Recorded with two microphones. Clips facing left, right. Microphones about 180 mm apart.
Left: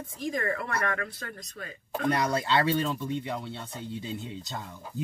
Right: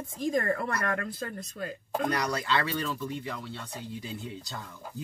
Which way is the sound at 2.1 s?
25° left (ahead or behind).